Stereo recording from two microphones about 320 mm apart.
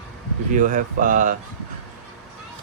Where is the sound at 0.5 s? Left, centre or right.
Right.